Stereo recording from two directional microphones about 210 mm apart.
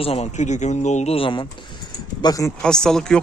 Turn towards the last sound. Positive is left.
turn(degrees=5)  # may be behind; listen again after turning